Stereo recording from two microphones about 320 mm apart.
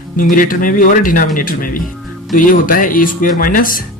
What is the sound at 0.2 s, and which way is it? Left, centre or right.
Speech, left.